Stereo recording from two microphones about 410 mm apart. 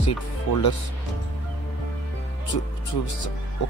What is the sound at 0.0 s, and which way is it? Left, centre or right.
Speech, left.